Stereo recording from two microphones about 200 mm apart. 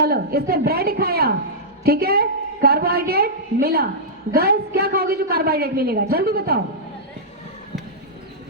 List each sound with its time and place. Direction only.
0.0 s a woman's voice: 50° right (ahead or behind)